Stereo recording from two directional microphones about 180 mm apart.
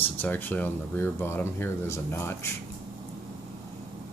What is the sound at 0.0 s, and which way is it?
Speech, 10° left (ahead or behind).